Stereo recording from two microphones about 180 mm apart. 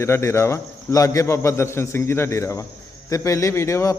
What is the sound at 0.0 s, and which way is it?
A man's voice, 15° left (ahead or behind).